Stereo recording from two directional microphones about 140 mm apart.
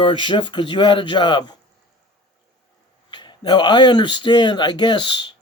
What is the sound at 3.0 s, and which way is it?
Speech, 35° left (ahead or behind).